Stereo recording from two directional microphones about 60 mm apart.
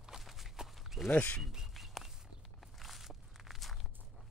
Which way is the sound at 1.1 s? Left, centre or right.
Left.